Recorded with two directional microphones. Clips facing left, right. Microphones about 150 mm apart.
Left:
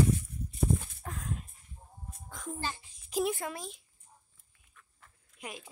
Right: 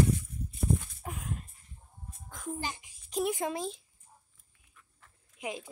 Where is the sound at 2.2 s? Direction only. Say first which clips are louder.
Right 2 dB; 5° right (ahead or behind).